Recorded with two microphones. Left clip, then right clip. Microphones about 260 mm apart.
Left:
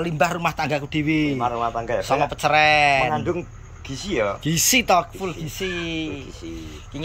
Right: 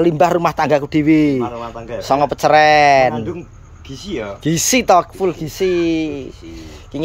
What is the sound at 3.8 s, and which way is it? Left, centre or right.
Speech, centre.